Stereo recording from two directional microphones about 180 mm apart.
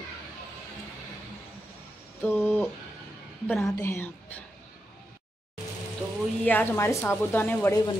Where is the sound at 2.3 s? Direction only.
5° left (ahead or behind).